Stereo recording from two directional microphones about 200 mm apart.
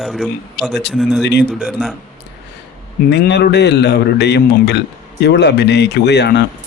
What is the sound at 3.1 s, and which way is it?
A man's voice, 55° left (ahead or behind).